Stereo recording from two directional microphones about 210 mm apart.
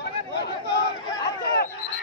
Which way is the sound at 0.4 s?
50° left (ahead or behind).